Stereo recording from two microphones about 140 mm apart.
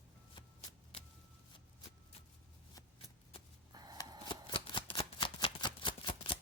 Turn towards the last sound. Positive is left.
turn(degrees=40)  # may be behind; listen again after turning